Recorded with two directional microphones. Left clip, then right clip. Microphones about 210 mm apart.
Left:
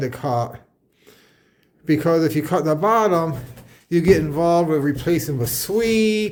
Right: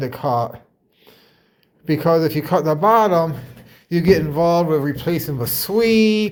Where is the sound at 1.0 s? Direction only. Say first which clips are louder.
Right 1 dB; 15° left (ahead or behind).